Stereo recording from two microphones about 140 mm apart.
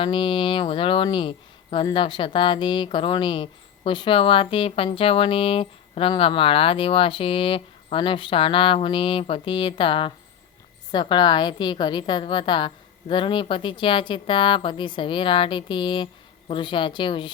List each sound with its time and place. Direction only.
0.0 s speech: 35° left (ahead or behind)